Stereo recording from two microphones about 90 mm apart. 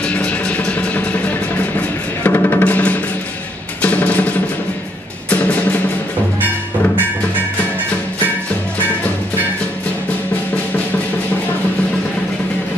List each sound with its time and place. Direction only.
0.1 s music: 15° left (ahead or behind)